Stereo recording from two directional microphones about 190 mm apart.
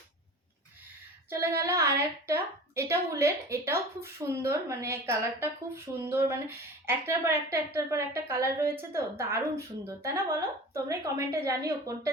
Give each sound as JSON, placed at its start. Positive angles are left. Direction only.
{"t": 1.3, "sound": "a woman's voice", "side_deg": -15}